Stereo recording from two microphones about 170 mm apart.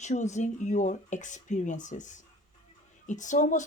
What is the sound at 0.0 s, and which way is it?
Speech, 45° left (ahead or behind).